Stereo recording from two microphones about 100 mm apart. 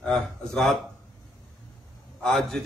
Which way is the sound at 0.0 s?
Centre (ahead or behind).